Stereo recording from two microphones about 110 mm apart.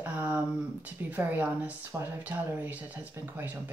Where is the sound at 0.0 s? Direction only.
15° right (ahead or behind).